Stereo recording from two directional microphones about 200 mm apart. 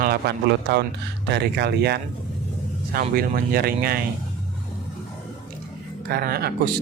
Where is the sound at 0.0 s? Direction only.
50° right (ahead or behind).